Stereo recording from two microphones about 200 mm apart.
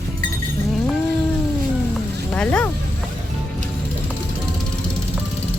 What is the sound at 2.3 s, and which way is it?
Speech, 5° left (ahead or behind).